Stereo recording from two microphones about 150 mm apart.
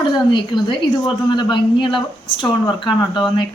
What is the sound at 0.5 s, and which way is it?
A woman's voice, 30° left (ahead or behind).